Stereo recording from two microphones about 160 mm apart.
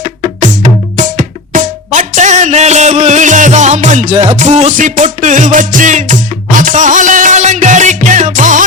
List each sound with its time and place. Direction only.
0.3 s music: 50° right (ahead or behind)